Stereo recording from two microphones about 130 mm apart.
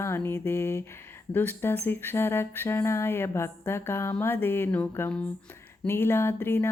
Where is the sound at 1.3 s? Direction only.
15° left (ahead or behind).